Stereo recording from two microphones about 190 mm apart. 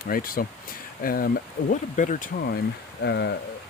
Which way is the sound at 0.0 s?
50° left (ahead or behind).